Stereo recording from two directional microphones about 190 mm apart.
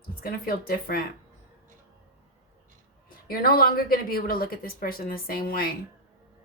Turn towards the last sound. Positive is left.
turn(degrees=50)  # may be behind; listen again after turning